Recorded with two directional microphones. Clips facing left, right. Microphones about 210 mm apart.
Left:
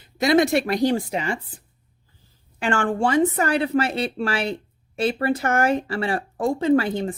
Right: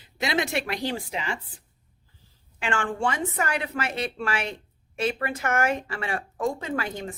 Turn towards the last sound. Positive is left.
turn(degrees=30)  # may be behind; listen again after turning